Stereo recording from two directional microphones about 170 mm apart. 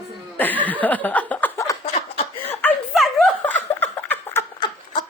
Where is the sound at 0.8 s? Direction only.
10° left (ahead or behind).